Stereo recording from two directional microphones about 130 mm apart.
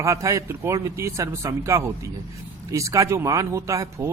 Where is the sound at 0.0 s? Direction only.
25° right (ahead or behind).